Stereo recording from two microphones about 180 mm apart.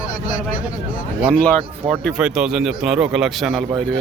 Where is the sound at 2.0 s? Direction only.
Centre (ahead or behind).